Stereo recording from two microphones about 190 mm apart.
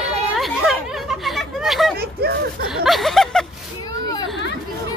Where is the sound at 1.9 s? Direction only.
55° right (ahead or behind).